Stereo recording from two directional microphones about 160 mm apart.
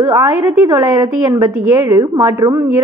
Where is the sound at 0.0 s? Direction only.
20° right (ahead or behind).